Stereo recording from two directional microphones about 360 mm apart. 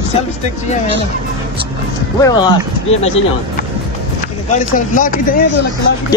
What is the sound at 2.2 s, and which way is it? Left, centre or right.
Speech, centre.